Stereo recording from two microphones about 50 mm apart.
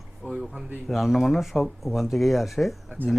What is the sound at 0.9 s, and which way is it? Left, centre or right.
Speech, centre.